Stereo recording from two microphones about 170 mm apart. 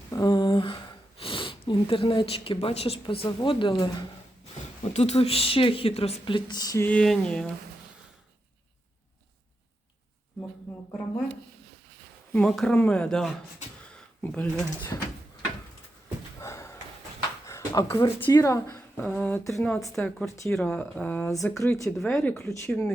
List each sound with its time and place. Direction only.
0.1 s a sound: 20° left (ahead or behind)
1.2 s speech: 30° left (ahead or behind)
4.8 s speech: 35° left (ahead or behind); by 6.8 s 20° left (ahead or behind)
6.8 s speech: 5° left (ahead or behind)
12.3 s speech: 5° left (ahead or behind)
16.4 s a sound: 15° left (ahead or behind)
18.0 s speech: 25° left (ahead or behind); by 20.3 s 5° left (ahead or behind)
20.3 s speech: 15° left (ahead or behind)
20.6 s speech: 5° left (ahead or behind)
21.4 s speech: centre (ahead or behind)